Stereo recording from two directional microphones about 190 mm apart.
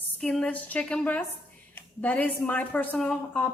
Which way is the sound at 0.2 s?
5° left (ahead or behind).